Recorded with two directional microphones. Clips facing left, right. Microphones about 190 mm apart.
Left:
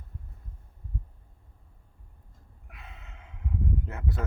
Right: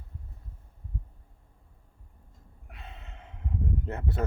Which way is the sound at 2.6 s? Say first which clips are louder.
Right 3 dB; 30° right (ahead or behind).